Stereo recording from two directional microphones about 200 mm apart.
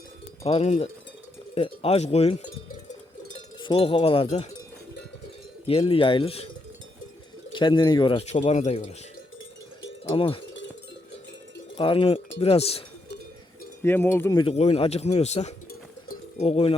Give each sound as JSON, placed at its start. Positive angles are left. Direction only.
{"t": 0.4, "sound": "a man's voice", "side_deg": 30}
{"t": 3.6, "sound": "a man's voice", "side_deg": 25}
{"t": 5.9, "sound": "a man's voice", "side_deg": 25}
{"t": 7.5, "sound": "a man's voice", "side_deg": 25}
{"t": 10.2, "sound": "a man's voice", "side_deg": 25}
{"t": 11.8, "sound": "a man's voice", "side_deg": 25}
{"t": 13.8, "sound": "cowbell", "side_deg": 10}
{"t": 14.3, "sound": "a man's voice", "side_deg": 30}
{"t": 16.0, "sound": "pigeon", "side_deg": 30}